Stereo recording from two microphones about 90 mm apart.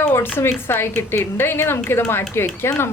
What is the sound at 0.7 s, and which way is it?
Speech, 25° left (ahead or behind).